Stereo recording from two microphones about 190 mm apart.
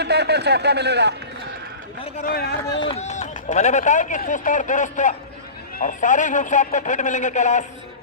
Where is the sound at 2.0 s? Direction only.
30° left (ahead or behind).